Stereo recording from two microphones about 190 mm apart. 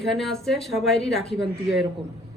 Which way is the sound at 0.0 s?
Centre (ahead or behind).